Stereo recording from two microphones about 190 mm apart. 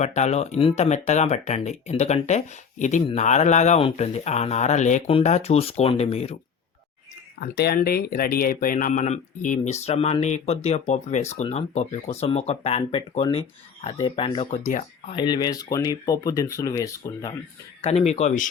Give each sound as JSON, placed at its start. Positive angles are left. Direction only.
{"t": 0.0, "sound": "speech", "side_deg": 35}
{"t": 7.3, "sound": "speech", "side_deg": 55}
{"t": 14.6, "sound": "speech", "side_deg": 40}
{"t": 15.1, "sound": "speech", "side_deg": 25}
{"t": 17.8, "sound": "speech", "side_deg": 35}